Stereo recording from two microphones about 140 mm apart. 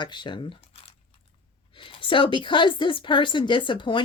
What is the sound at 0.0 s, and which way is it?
A woman's voice, 35° left (ahead or behind).